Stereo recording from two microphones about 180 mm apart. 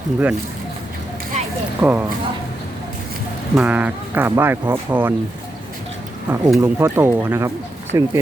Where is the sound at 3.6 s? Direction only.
10° right (ahead or behind).